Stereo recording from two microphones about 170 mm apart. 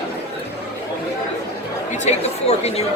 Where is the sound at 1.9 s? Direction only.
40° left (ahead or behind).